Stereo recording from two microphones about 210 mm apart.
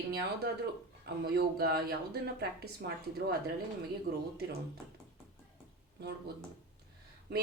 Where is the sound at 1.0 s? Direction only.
50° right (ahead or behind).